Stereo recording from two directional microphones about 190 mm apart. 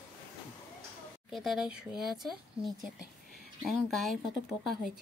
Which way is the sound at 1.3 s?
Centre (ahead or behind).